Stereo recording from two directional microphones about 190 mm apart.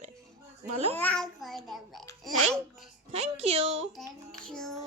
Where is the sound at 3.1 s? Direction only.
30° right (ahead or behind).